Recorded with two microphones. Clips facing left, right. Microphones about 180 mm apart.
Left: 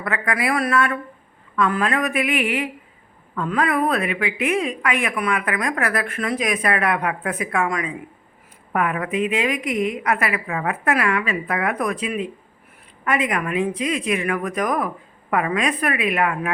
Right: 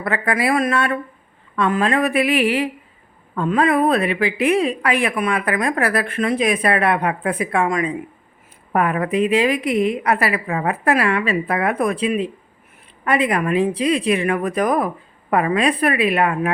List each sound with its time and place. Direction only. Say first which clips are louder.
0.0 s a woman's voice: right 3 dB; 30° right (ahead or behind)